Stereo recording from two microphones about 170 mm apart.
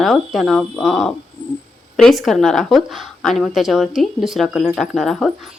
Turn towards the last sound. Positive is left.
turn(degrees=0)  # may be behind; listen again after turning